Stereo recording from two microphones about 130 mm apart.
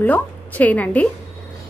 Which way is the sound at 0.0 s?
15° left (ahead or behind).